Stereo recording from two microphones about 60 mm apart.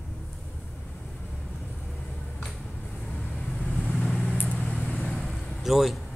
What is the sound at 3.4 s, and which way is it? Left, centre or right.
Vehicle, centre.